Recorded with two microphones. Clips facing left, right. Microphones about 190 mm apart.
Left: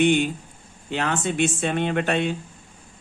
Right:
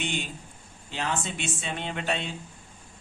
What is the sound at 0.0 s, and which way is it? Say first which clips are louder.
A man's voice: left 14 dB; 60° left (ahead or behind).